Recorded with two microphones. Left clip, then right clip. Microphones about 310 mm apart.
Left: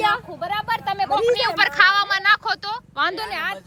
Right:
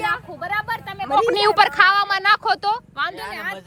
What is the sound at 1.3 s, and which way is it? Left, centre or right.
A woman's voice, centre.